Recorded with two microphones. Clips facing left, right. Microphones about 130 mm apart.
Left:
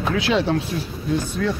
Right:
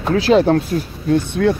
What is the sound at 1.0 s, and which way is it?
Speech, 60° right (ahead or behind).